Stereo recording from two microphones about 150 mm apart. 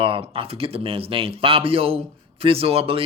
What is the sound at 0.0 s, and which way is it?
Speech, 35° right (ahead or behind).